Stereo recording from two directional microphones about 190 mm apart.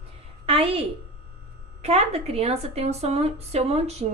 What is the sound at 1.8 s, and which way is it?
A woman's voice, 35° right (ahead or behind).